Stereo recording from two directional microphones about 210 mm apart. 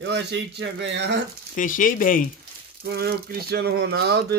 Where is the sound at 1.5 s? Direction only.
40° left (ahead or behind).